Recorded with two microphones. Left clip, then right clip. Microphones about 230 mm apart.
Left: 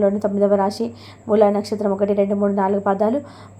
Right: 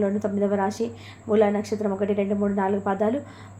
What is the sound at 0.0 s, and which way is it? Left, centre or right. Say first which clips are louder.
A woman's voice: left 7 dB; left.